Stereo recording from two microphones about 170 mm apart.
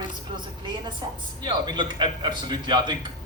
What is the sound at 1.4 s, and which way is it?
A man's voice, 25° right (ahead or behind).